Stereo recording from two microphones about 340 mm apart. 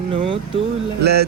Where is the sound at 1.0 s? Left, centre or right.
Right.